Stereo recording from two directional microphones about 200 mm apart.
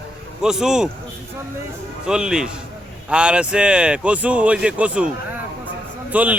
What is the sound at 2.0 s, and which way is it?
A man's voice, 5° right (ahead or behind).